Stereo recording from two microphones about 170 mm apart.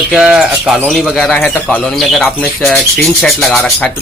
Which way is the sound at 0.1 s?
5° right (ahead or behind).